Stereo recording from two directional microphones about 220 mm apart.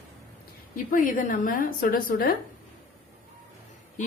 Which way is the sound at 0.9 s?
35° left (ahead or behind).